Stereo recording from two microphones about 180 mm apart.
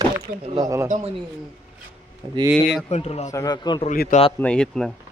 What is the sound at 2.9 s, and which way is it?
Speech, 35° left (ahead or behind).